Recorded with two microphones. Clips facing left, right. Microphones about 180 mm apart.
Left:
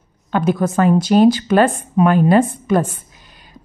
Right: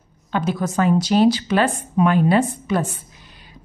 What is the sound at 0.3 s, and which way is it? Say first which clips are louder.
A woman's voice: left 5 dB; 55° left (ahead or behind).